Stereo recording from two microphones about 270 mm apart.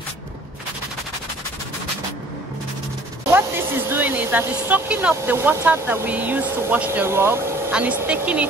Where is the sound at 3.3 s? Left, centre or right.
Centre.